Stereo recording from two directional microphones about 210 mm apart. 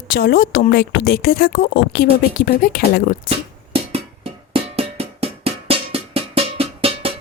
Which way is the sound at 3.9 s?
25° right (ahead or behind).